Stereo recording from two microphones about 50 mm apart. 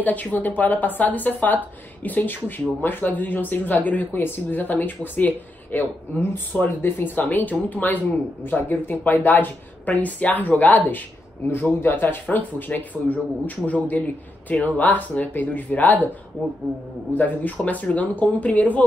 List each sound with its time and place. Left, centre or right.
0.0 s a man's voice: left
17.1 s speech: left